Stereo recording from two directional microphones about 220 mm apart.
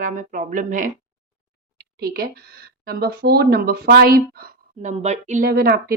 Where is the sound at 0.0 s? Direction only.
35° right (ahead or behind).